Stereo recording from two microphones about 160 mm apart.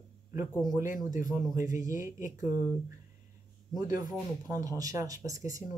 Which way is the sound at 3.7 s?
25° right (ahead or behind).